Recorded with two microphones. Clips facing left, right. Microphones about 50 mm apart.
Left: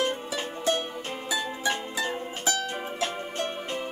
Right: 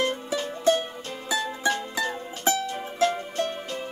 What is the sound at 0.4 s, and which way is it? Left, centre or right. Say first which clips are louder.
Music: right 6 dB; left.